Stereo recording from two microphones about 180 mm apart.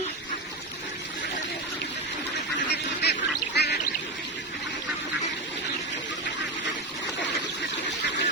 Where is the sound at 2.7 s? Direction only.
65° left (ahead or behind).